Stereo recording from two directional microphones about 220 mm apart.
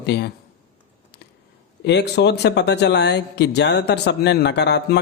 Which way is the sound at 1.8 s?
50° left (ahead or behind).